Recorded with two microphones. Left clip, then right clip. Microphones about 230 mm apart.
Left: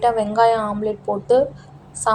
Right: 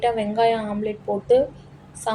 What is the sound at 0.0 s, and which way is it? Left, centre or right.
A woman's voice, centre.